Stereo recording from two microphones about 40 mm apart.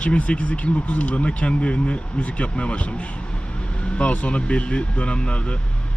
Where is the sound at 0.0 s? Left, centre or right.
Left.